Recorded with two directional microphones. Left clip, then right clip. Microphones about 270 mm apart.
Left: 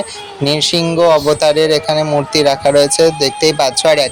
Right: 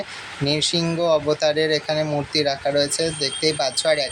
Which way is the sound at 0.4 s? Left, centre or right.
Left.